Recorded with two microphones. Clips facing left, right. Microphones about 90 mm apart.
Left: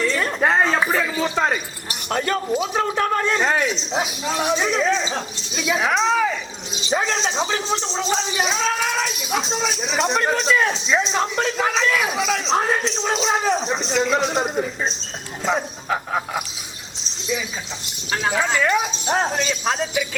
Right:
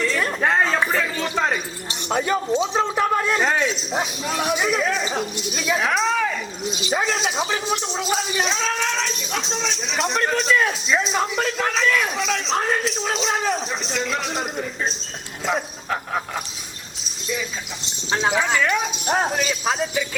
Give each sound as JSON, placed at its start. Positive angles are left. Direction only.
{"t": 0.0, "sound": "a sound", "side_deg": 0}
{"t": 2.0, "sound": "speech", "side_deg": -10}
{"t": 5.5, "sound": "speech", "side_deg": 5}
{"t": 17.8, "sound": "speech", "side_deg": -25}
{"t": 18.5, "sound": "speech", "side_deg": 10}
{"t": 19.1, "sound": "speech", "side_deg": -5}